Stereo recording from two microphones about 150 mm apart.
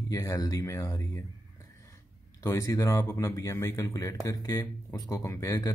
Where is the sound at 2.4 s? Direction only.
20° left (ahead or behind).